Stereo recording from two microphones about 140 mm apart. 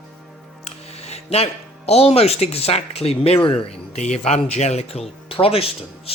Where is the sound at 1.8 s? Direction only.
45° left (ahead or behind).